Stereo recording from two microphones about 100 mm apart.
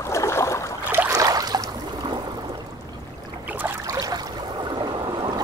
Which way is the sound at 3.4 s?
20° right (ahead or behind).